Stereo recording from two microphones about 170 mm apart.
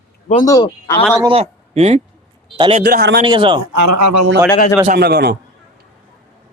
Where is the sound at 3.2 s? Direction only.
30° right (ahead or behind).